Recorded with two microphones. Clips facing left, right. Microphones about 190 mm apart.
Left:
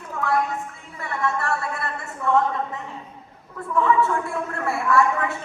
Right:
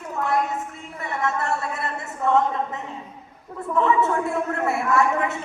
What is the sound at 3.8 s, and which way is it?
A woman's voice, 20° right (ahead or behind).